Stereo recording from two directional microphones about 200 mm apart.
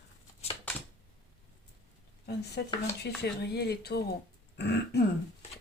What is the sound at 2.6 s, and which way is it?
Throat clearing, 60° left (ahead or behind).